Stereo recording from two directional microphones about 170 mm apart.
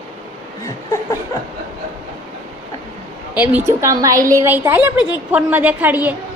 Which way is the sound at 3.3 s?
10° right (ahead or behind).